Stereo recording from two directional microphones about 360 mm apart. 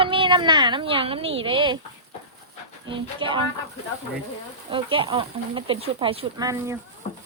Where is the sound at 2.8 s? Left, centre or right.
Centre.